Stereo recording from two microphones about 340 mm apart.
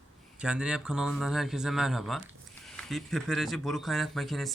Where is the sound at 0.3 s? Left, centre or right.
Centre.